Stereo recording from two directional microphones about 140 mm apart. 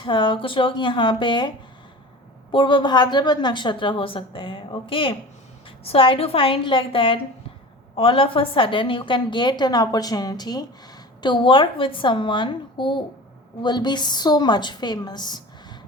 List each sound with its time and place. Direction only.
0.0 s a woman's voice: 35° left (ahead or behind)